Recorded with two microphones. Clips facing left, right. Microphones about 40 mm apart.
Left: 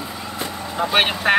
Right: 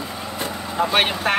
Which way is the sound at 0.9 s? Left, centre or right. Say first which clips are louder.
Left 3 dB; centre.